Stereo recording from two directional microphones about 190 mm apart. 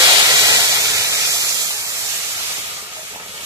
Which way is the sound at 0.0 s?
20° right (ahead or behind).